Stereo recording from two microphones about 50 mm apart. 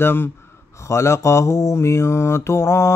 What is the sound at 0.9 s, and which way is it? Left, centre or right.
Mantra, left.